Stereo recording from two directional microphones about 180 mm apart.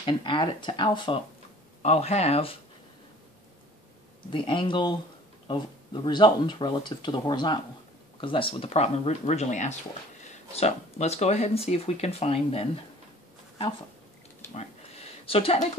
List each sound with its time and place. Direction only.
0.0 s speech: 25° left (ahead or behind)
1.8 s speech: 35° left (ahead or behind)
4.3 s speech: 25° left (ahead or behind)
14.5 s a sound: 35° left (ahead or behind)